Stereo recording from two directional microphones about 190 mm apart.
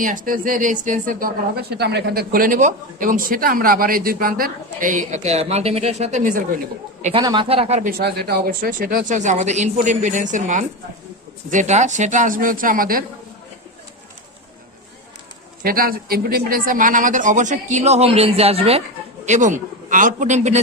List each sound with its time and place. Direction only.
0.0 s speech: 45° right (ahead or behind)
7.0 s speech: 30° right (ahead or behind)
8.0 s speech: 55° right (ahead or behind)
15.6 s speech: 50° right (ahead or behind)